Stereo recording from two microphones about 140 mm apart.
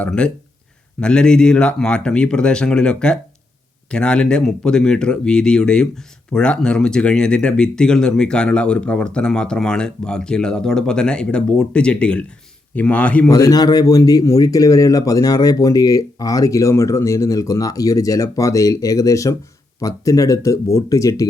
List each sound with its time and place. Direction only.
0.0 s speech: 5° left (ahead or behind)
13.3 s speech: 25° left (ahead or behind)